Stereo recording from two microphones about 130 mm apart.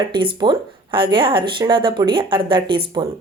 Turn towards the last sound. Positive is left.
turn(degrees=-40)  # may be behind; listen again after turning